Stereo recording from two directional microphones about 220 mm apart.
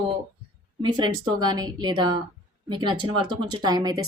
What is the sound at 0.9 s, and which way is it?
A woman's voice, 20° right (ahead or behind).